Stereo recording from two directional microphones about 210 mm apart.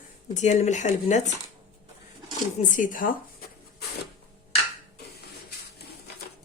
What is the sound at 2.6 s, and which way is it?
Speech, 40° left (ahead or behind).